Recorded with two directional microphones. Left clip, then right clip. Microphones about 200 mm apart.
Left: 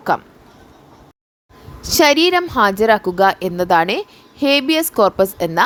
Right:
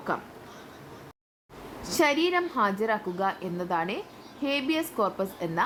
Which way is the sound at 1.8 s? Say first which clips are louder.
Left 12 dB; 40° left (ahead or behind).